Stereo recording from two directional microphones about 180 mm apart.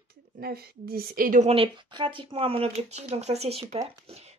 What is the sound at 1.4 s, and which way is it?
Speech, 30° right (ahead or behind).